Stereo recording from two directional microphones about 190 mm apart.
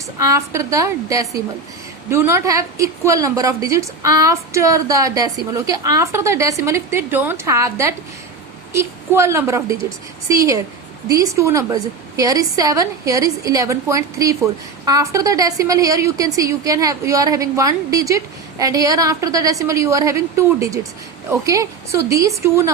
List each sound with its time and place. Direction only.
0.2 s a woman's voice: 15° right (ahead or behind)